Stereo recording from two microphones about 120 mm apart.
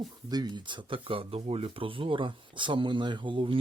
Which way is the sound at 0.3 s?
35° right (ahead or behind).